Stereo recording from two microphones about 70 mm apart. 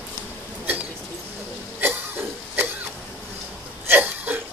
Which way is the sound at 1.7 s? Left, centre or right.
Right.